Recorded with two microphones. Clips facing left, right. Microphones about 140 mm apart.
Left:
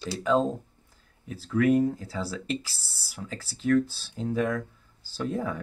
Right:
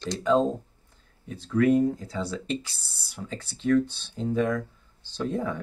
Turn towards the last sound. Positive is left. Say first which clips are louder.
# right 1 dB
turn(degrees=0)  # may be behind; listen again after turning